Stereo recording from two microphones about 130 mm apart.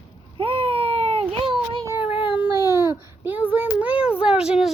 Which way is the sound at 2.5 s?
25° right (ahead or behind).